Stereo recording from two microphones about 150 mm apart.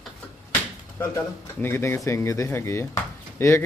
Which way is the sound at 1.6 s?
15° left (ahead or behind).